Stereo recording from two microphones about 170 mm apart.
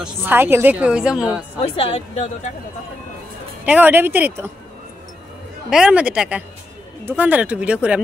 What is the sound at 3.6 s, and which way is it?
Speech, 10° right (ahead or behind).